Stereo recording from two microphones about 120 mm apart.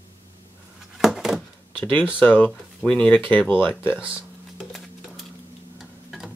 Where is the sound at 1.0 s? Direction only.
Centre (ahead or behind).